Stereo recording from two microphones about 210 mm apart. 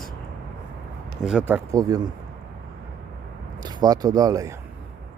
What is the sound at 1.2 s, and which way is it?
Speech, 5° right (ahead or behind).